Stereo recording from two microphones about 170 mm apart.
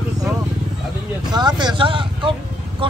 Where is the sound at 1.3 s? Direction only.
25° right (ahead or behind).